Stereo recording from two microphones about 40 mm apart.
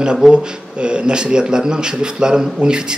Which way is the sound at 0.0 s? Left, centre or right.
Right.